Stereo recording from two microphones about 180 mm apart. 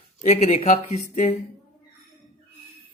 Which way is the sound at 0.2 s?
40° left (ahead or behind).